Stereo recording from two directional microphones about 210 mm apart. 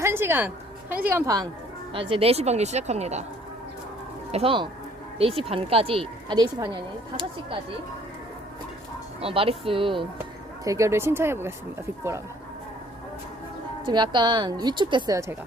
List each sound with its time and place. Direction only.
0.0 s a sound: 10° right (ahead or behind)
1.0 s speech: 15° right (ahead or behind)
1.9 s a woman's voice: 25° right (ahead or behind)
4.3 s speech: 30° right (ahead or behind)
9.2 s speech: 25° right (ahead or behind)
10.6 s speech: 15° right (ahead or behind)
13.8 s speech: 20° right (ahead or behind)